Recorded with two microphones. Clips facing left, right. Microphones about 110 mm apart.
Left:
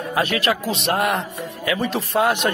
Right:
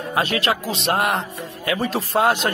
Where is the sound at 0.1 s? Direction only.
30° right (ahead or behind).